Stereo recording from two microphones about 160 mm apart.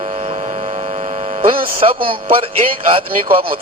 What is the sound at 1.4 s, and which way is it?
Speech, 35° right (ahead or behind).